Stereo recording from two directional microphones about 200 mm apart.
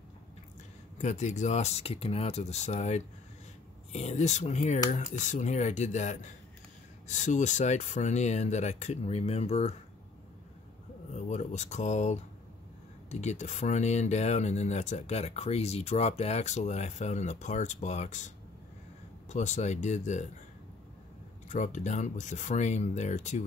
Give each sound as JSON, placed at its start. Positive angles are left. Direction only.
{"t": 0.9, "sound": "speech", "side_deg": 35}
{"t": 11.1, "sound": "speech", "side_deg": 35}
{"t": 21.5, "sound": "speech", "side_deg": 35}